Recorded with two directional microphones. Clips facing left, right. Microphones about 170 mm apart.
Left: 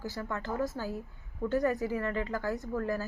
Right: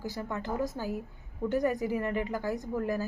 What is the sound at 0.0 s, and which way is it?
Speech, 15° right (ahead or behind).